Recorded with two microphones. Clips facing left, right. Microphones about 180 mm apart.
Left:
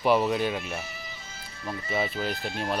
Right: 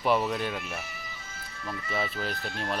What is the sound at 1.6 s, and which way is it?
Speech, 25° left (ahead or behind).